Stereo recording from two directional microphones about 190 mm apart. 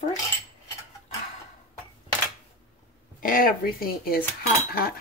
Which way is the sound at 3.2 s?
50° left (ahead or behind).